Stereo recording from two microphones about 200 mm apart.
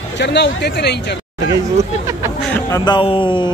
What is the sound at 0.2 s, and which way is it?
Speech, 60° left (ahead or behind).